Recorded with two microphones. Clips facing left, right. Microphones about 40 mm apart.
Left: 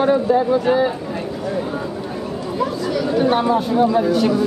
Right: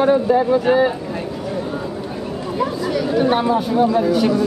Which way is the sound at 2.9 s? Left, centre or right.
Centre.